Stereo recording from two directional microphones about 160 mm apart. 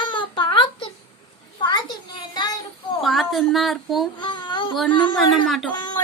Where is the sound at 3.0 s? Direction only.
Centre (ahead or behind).